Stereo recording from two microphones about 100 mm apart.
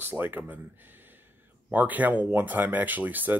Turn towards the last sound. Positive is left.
turn(degrees=-20)  # may be behind; listen again after turning